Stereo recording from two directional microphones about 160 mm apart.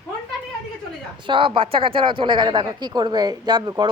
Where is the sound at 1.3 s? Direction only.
30° right (ahead or behind).